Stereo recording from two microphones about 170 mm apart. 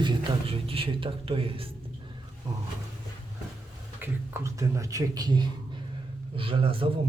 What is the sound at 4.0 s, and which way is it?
A man's voice, 15° right (ahead or behind).